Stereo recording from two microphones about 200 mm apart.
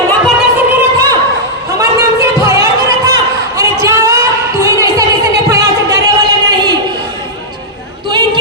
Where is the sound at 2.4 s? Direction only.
15° right (ahead or behind).